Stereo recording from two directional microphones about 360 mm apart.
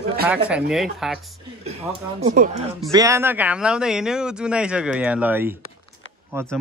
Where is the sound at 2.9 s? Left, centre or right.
Centre.